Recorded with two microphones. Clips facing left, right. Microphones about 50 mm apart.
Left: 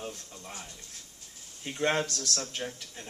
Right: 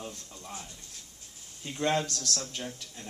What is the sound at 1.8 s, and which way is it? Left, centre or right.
A man's voice, left.